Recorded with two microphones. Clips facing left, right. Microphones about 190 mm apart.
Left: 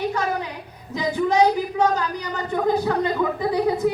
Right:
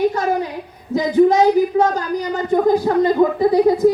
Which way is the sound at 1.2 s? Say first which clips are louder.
Right 7 dB; 45° right (ahead or behind).